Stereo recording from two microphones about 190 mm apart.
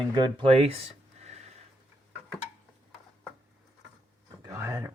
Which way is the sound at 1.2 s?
35° right (ahead or behind).